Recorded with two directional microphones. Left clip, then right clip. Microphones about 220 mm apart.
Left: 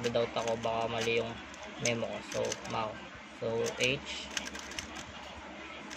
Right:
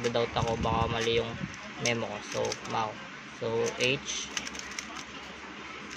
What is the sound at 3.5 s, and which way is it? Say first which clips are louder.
Speech: right 3 dB; 15° right (ahead or behind).